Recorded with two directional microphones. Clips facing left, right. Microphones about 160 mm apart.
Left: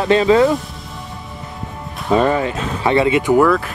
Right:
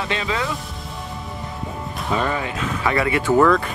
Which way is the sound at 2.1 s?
40° left (ahead or behind).